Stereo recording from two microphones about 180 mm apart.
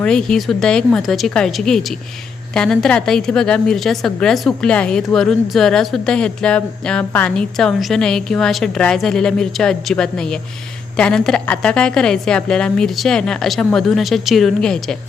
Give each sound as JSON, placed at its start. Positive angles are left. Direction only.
{"t": 0.0, "sound": "a woman's voice", "side_deg": 5}